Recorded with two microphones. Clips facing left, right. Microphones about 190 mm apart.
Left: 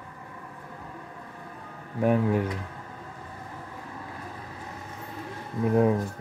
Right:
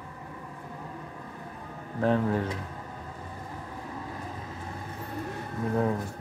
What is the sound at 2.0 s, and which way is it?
Speech, 10° left (ahead or behind).